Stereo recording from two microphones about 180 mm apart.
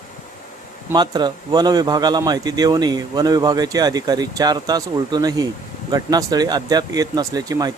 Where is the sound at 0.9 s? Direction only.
25° right (ahead or behind).